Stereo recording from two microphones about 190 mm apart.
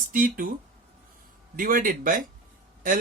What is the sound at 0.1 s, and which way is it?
Speech, 45° right (ahead or behind).